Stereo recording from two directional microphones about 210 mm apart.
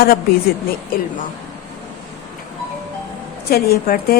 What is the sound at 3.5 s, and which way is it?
Speech, 45° left (ahead or behind).